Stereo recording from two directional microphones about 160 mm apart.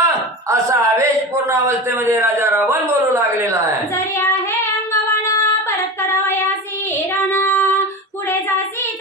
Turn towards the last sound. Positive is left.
turn(degrees=20)  # may be behind; listen again after turning